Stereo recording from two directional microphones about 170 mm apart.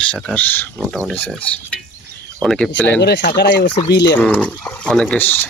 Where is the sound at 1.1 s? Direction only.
10° left (ahead or behind).